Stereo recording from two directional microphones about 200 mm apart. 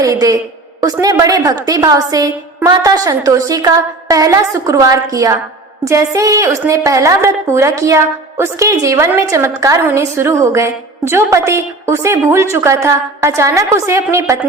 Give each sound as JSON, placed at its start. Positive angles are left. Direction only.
{"t": 0.0, "sound": "a woman's voice", "side_deg": -15}